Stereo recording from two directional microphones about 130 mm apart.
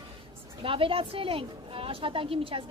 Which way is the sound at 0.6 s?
45° right (ahead or behind).